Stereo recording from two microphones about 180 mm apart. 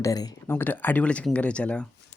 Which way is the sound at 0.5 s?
10° left (ahead or behind).